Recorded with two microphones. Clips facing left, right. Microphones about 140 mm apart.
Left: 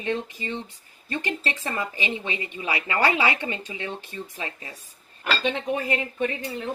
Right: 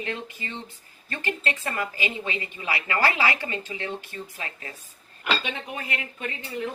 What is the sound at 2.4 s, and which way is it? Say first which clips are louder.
Speech: left 1 dB; 25° left (ahead or behind).